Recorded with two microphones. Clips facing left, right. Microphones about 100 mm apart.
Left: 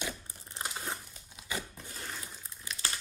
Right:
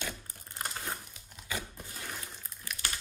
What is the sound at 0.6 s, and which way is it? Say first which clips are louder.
Crumpling: even; 10° left (ahead or behind).